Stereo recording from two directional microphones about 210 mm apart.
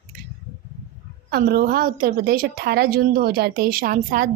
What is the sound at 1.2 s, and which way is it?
A woman's voice, 45° right (ahead or behind).